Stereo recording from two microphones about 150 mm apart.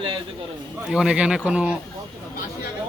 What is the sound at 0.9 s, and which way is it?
Speech, 5° right (ahead or behind).